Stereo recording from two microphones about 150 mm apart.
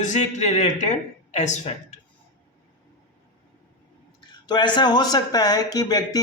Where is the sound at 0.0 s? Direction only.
55° left (ahead or behind).